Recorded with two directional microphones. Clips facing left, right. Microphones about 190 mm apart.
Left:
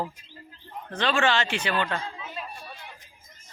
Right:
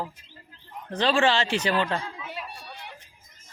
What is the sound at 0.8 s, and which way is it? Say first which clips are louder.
Speech: right 2 dB; 35° right (ahead or behind).